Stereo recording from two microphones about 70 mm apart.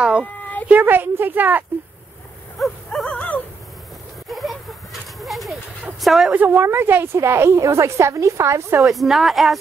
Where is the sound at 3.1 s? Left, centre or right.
Centre.